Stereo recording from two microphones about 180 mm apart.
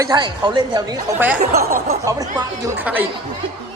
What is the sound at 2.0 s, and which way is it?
Speech, 20° right (ahead or behind).